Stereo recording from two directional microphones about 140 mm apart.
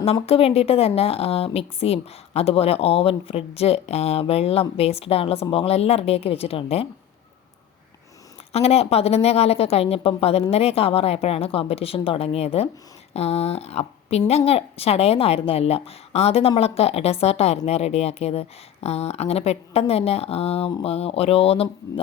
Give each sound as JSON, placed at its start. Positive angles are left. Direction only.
{"t": 0.0, "sound": "a woman's voice", "side_deg": 45}
{"t": 8.5, "sound": "a woman's voice", "side_deg": 45}